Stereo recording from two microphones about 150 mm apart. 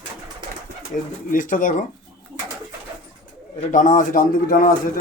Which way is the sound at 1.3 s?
65° left (ahead or behind).